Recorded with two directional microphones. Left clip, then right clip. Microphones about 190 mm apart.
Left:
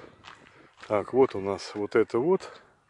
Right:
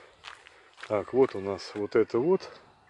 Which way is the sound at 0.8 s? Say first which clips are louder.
Left 2 dB; 25° left (ahead or behind).